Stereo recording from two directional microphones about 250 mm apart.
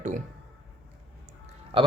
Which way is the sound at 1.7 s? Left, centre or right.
Right.